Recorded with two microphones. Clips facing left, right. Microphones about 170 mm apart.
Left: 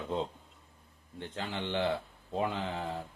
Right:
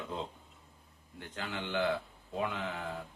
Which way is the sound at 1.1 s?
30° left (ahead or behind).